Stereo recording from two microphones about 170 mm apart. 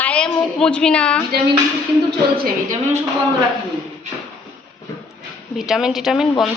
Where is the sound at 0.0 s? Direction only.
5° left (ahead or behind).